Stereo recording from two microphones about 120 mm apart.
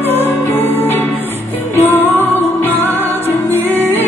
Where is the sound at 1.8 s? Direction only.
15° left (ahead or behind).